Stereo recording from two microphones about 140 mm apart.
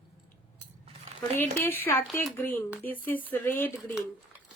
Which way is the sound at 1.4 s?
15° left (ahead or behind).